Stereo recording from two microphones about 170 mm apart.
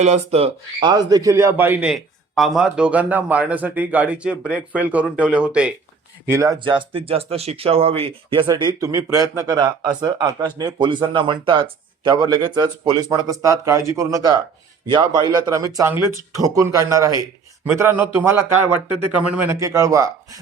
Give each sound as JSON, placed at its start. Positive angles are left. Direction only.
{"t": 0.0, "sound": "a man's voice", "side_deg": -40}
{"t": 6.2, "sound": "a man's voice", "side_deg": -15}